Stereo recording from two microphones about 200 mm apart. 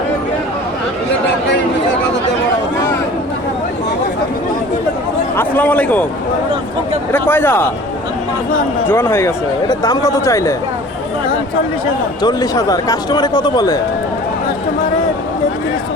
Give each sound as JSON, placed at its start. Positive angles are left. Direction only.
{"t": 5.4, "sound": "a man's voice", "side_deg": 10}
{"t": 7.1, "sound": "speech", "side_deg": 10}
{"t": 8.9, "sound": "speech", "side_deg": 10}
{"t": 12.2, "sound": "speech", "side_deg": 20}